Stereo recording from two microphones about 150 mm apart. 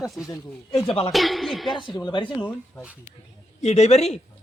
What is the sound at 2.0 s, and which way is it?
Speech, 30° left (ahead or behind).